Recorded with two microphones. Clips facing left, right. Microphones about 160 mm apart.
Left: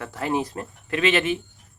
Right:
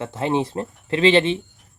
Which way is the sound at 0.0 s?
25° right (ahead or behind).